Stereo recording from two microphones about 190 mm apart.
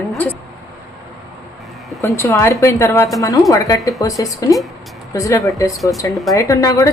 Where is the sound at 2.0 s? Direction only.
15° left (ahead or behind).